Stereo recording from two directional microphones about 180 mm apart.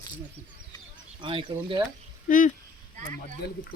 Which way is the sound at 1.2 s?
30° right (ahead or behind).